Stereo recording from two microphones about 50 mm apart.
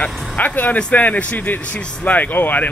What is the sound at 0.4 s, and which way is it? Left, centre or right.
Speech, left.